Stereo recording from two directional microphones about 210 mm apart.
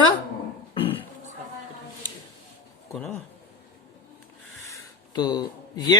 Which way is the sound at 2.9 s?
5° left (ahead or behind).